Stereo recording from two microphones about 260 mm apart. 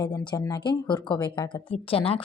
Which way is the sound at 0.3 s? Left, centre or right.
Centre.